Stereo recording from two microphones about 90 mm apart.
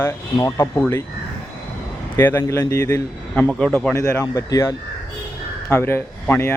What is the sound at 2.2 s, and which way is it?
Speech, 25° left (ahead or behind).